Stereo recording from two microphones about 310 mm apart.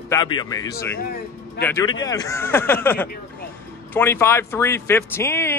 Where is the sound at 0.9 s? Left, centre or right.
Left.